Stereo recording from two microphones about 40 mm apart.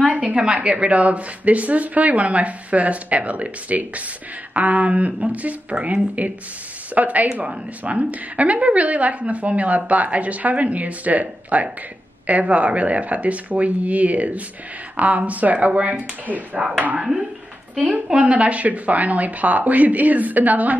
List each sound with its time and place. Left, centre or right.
0.1 s a sound: right
0.4 s a woman's voice: right
7.0 s a woman's voice: right